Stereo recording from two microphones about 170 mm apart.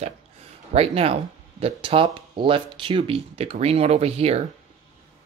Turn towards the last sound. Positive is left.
turn(degrees=-35)  # may be behind; listen again after turning